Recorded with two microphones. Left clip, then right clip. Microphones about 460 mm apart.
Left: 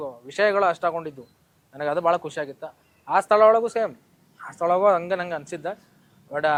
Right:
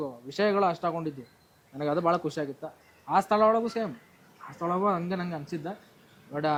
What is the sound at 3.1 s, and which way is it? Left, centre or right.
Speech, left.